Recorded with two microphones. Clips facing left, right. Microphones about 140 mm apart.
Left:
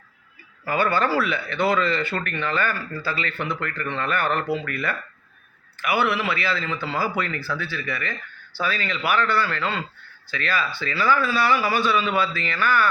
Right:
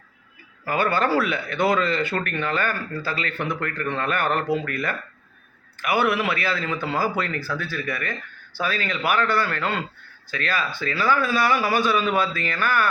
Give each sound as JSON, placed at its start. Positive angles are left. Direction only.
{"t": 0.6, "sound": "a man's voice", "side_deg": -45}